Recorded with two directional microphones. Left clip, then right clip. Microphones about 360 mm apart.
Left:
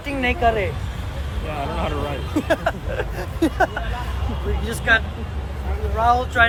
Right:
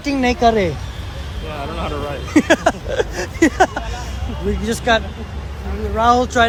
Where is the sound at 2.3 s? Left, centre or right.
Centre.